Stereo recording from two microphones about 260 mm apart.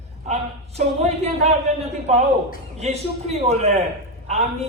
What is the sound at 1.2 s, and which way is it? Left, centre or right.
A man's voice, right.